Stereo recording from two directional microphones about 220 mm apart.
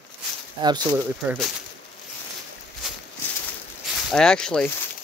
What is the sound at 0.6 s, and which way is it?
Speech, 20° right (ahead or behind).